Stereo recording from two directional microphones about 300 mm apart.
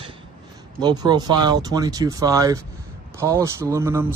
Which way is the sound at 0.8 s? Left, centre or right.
Centre.